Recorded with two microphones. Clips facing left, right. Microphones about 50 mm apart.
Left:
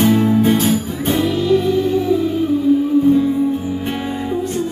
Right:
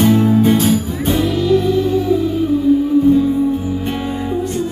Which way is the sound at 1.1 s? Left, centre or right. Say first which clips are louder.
Right 1 dB; centre.